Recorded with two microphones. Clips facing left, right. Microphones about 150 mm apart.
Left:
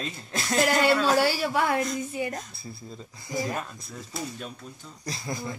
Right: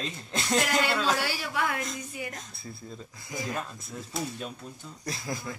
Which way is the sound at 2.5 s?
Centre (ahead or behind).